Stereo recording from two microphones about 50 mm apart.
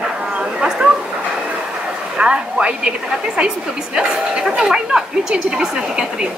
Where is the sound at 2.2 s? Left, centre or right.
Centre.